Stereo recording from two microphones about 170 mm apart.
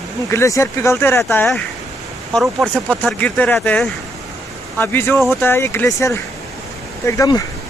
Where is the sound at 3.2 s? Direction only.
10° left (ahead or behind).